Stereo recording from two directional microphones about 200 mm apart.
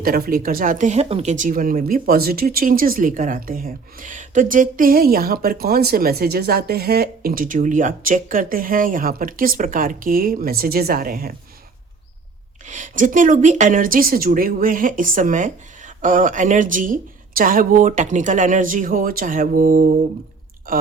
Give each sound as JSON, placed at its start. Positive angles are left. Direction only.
{"t": 0.0, "sound": "speech", "side_deg": -45}
{"t": 12.6, "sound": "speech", "side_deg": -40}